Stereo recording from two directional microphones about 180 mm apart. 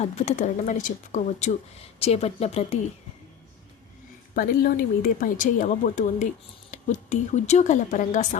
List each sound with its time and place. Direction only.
0.0 s speech: 40° left (ahead or behind)
4.4 s speech: 55° left (ahead or behind)